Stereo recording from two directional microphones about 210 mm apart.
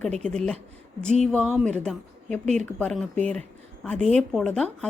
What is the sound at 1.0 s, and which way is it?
Speech, 35° right (ahead or behind).